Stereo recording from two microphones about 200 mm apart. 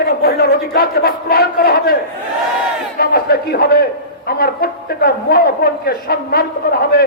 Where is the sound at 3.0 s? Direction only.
50° left (ahead or behind).